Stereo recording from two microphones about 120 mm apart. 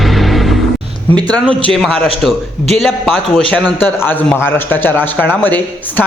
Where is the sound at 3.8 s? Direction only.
15° left (ahead or behind).